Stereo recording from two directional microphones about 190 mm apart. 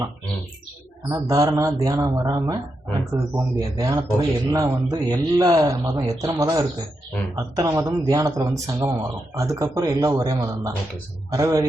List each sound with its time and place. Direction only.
1.0 s a man's voice: 15° right (ahead or behind)